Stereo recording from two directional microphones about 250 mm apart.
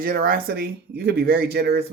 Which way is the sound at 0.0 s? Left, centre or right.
Right.